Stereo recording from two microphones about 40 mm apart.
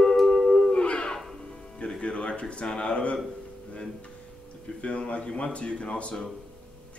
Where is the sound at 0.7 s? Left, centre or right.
Left.